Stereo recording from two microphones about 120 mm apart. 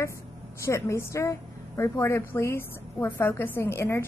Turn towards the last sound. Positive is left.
turn(degrees=20)  # may be behind; listen again after turning